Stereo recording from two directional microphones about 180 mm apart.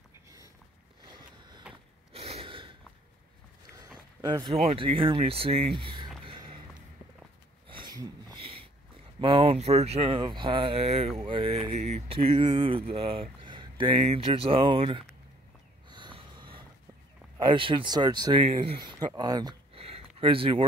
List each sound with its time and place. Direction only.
1.0 s vehicle: 25° right (ahead or behind)
2.1 s gasp: 35° right (ahead or behind)
4.2 s speech: 25° right (ahead or behind)
4.6 s speech: 35° right (ahead or behind)
7.6 s a sound: 25° right (ahead or behind)
9.2 s speech: 30° right (ahead or behind)
15.9 s snort: 25° right (ahead or behind)
17.4 s speech: 25° right (ahead or behind)